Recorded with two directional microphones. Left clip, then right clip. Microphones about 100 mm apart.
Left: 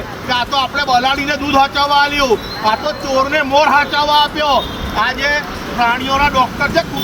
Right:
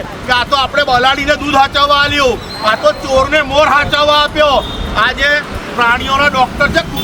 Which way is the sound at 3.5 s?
30° right (ahead or behind).